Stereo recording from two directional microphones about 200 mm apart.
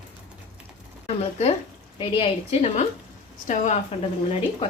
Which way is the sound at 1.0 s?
30° left (ahead or behind).